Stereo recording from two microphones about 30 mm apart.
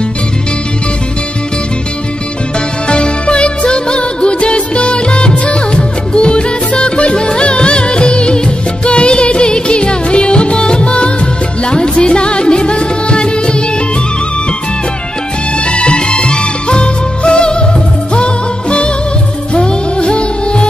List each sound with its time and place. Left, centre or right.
2.9 s music: left
15.6 s music: left